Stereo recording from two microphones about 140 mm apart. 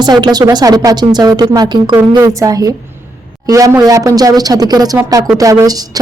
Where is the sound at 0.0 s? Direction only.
30° right (ahead or behind).